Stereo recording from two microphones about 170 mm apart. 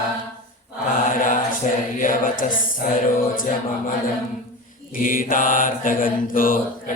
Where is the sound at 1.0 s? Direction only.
50° left (ahead or behind).